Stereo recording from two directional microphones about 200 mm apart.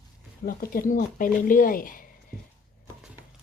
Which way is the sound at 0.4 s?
45° left (ahead or behind).